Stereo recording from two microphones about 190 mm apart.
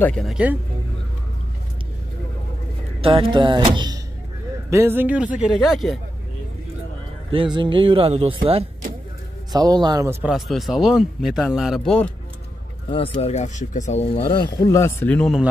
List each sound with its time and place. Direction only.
0.0 s speech: centre (ahead or behind)
3.0 s speech: 30° right (ahead or behind)
4.6 s a man's voice: 15° right (ahead or behind)
7.2 s speech: 25° right (ahead or behind)
9.5 s speech: 20° right (ahead or behind)
10.2 s speech: centre (ahead or behind)
12.9 s speech: 30° left (ahead or behind)
14.3 s speech: 20° left (ahead or behind); by 15.4 s 5° left (ahead or behind)